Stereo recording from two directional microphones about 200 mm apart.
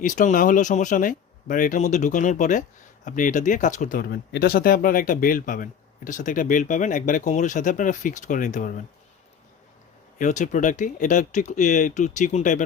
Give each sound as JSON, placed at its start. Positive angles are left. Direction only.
{"t": 0.0, "sound": "speech", "side_deg": 40}
{"t": 10.2, "sound": "speech", "side_deg": 40}